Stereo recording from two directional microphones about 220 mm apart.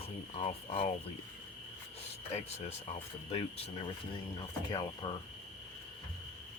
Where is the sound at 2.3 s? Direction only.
30° left (ahead or behind).